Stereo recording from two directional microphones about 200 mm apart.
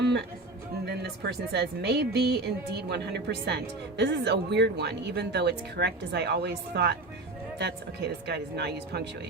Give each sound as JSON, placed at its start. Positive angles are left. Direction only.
{"t": 0.9, "sound": "speech", "side_deg": -55}